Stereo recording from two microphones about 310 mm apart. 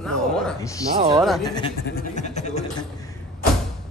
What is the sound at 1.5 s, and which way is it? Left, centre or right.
Speech, centre.